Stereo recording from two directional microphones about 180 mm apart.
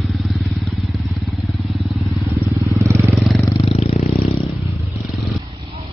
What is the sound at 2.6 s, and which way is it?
Vehicle, 15° right (ahead or behind).